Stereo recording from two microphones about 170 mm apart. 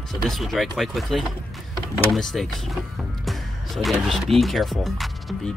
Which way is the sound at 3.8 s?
Centre (ahead or behind).